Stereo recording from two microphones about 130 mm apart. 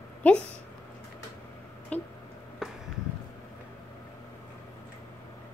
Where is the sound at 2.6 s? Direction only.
5° right (ahead or behind).